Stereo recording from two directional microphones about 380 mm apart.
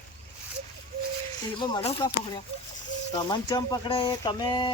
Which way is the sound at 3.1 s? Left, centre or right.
Centre.